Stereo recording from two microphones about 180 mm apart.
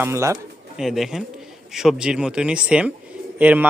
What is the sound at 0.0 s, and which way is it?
Speech, 15° right (ahead or behind).